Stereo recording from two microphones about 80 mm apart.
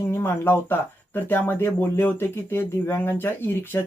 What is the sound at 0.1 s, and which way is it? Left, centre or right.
Speech, left.